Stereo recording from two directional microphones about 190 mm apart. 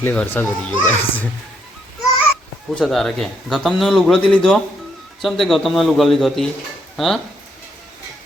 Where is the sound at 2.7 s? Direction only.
Centre (ahead or behind).